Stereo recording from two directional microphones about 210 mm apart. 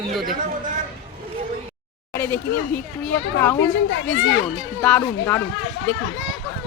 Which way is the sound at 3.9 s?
60° left (ahead or behind).